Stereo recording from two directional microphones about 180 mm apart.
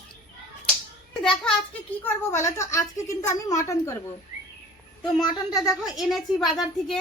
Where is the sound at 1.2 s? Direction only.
5° left (ahead or behind).